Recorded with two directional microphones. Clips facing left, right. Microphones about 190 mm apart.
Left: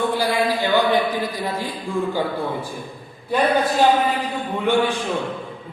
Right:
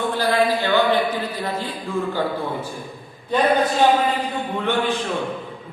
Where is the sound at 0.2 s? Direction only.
10° left (ahead or behind).